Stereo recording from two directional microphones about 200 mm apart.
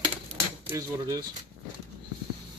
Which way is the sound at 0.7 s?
15° right (ahead or behind).